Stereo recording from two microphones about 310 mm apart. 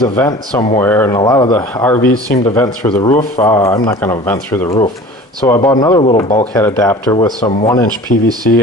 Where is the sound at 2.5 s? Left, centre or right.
Centre; by 8.3 s left.